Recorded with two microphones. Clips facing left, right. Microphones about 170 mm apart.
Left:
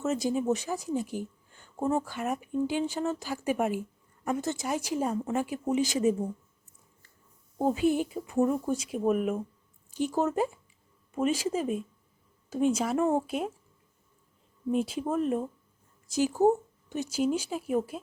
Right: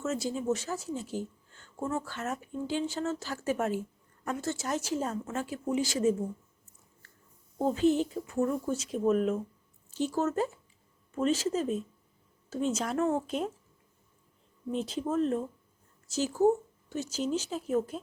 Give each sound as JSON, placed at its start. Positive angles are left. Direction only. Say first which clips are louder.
{"t": 0.0, "sound": "speech", "louder": "left 4 dB", "side_deg": 15}
{"t": 7.6, "sound": "speech", "louder": "even", "side_deg": 10}
{"t": 14.7, "sound": "speech", "louder": "left 3 dB", "side_deg": 10}